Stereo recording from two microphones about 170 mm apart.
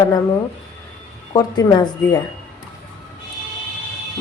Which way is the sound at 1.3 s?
20° left (ahead or behind).